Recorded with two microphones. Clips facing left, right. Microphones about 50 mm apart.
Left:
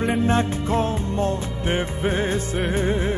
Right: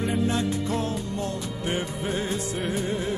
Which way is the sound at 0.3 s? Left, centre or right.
Left.